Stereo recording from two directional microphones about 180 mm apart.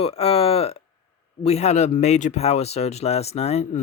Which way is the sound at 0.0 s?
35° left (ahead or behind).